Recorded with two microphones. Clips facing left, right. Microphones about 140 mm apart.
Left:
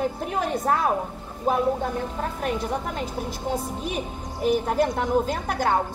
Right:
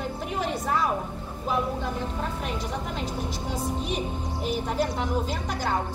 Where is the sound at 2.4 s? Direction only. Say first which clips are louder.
Left 5 dB; 50° left (ahead or behind).